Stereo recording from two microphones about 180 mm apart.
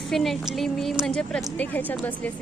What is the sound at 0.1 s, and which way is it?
A woman's voice, centre (ahead or behind).